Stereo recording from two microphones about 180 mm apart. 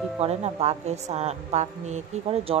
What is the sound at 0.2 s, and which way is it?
Speech, 35° right (ahead or behind).